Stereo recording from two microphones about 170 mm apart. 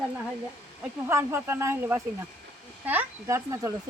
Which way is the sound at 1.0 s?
15° right (ahead or behind).